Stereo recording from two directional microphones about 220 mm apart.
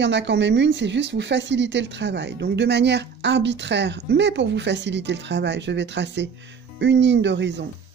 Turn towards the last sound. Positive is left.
turn(degrees=-55)  # may be behind; listen again after turning